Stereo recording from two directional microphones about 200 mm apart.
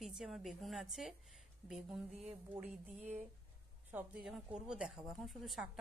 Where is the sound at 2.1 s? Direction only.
30° right (ahead or behind).